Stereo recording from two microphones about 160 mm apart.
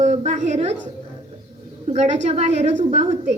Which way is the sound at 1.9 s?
45° right (ahead or behind).